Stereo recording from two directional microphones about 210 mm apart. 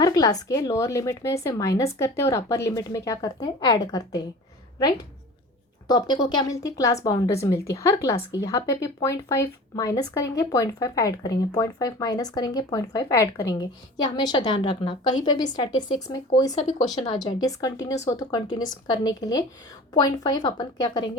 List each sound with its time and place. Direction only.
0.0 s a woman's voice: 15° left (ahead or behind)
16.6 s speech: 35° left (ahead or behind)
16.8 s a woman's voice: 20° left (ahead or behind)